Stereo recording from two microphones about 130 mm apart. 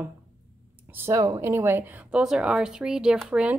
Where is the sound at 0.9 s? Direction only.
20° right (ahead or behind).